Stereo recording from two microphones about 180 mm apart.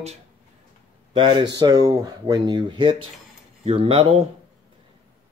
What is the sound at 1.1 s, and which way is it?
Speech, 25° right (ahead or behind).